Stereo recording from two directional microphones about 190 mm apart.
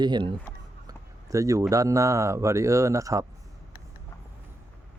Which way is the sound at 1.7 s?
15° right (ahead or behind).